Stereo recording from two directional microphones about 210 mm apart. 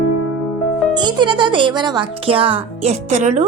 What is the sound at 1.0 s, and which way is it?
A woman's voice, 20° right (ahead or behind).